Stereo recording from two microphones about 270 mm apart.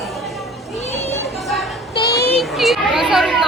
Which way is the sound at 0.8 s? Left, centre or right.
Left.